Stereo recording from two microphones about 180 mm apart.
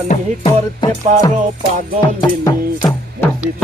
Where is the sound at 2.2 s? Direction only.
25° left (ahead or behind).